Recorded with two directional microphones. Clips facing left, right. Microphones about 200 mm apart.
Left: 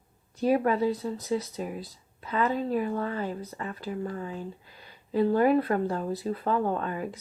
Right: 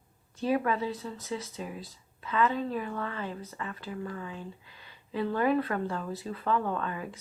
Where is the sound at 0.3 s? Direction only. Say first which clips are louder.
Left 4 dB; 40° left (ahead or behind).